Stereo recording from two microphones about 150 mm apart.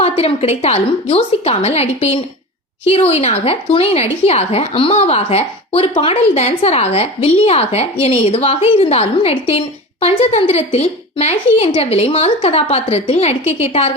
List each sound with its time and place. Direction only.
0.2 s a woman's voice: 45° left (ahead or behind)